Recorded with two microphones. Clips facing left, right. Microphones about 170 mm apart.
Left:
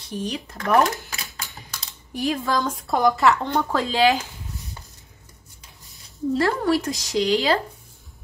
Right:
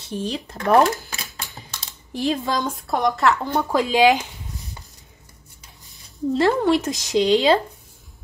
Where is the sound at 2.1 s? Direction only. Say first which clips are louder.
Right 1 dB; 25° right (ahead or behind).